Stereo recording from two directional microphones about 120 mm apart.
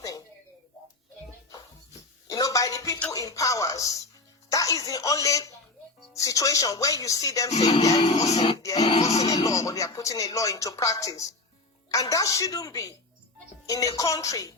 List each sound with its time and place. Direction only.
1.5 s music: 30° left (ahead or behind)
3.1 s a sound: 30° left (ahead or behind)
4.5 s speech: 30° left (ahead or behind)
8.1 s speech: 65° left (ahead or behind)
9.2 s speech: 30° left (ahead or behind)